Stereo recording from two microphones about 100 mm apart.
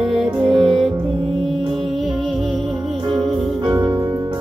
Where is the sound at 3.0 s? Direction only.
55° right (ahead or behind).